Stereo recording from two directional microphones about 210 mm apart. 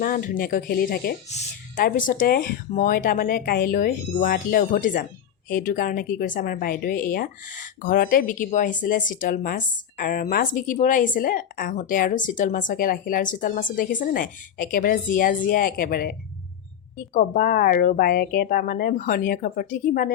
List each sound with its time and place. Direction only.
0.0 s a woman's voice: 40° left (ahead or behind)
17.2 s speech: 45° left (ahead or behind)